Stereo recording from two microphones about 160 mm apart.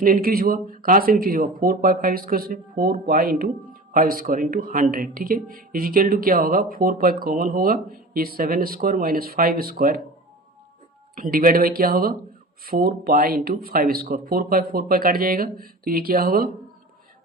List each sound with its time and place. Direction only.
0.0 s speech: 65° right (ahead or behind)
11.1 s speech: 65° right (ahead or behind)